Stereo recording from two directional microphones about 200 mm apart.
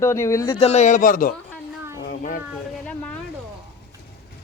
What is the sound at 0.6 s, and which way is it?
A man's voice, 35° left (ahead or behind).